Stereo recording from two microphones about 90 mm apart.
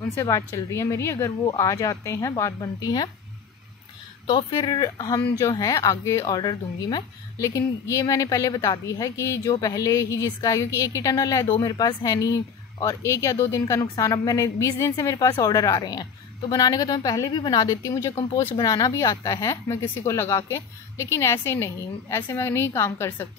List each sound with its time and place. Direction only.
0.1 s speech: 35° left (ahead or behind)
1.4 s speech: 40° left (ahead or behind)
4.6 s a woman's voice: 50° left (ahead or behind)
6.3 s a woman's voice: 50° left (ahead or behind)
7.3 s a woman's voice: 35° left (ahead or behind)